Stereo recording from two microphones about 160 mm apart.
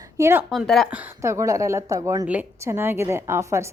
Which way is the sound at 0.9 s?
10° right (ahead or behind).